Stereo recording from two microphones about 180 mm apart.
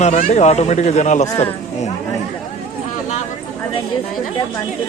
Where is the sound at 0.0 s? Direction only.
40° left (ahead or behind).